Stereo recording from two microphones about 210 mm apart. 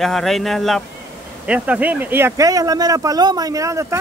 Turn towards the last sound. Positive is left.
turn(degrees=-15)  # may be behind; listen again after turning